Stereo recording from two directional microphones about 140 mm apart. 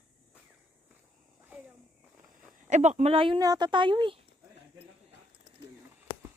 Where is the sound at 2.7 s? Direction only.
60° right (ahead or behind).